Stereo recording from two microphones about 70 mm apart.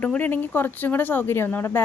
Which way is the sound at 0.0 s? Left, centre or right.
Left.